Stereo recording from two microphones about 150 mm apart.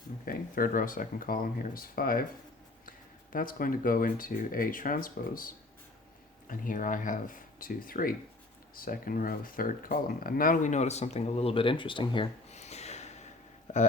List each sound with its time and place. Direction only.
0.3 s speech: 70° left (ahead or behind)
3.3 s speech: 70° left (ahead or behind); by 12.3 s 35° left (ahead or behind)
12.5 s a sound: 45° left (ahead or behind)